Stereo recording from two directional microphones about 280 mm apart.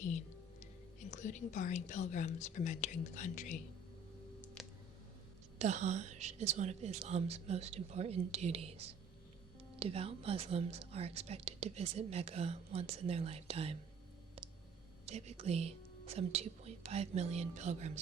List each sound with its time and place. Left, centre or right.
1.1 s speech: left
4.6 s a sound: centre
5.5 s speech: right
9.7 s speech: right
15.0 s speech: right